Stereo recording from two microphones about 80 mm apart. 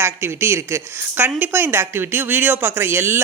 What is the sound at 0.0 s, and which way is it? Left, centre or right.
A woman's voice, right.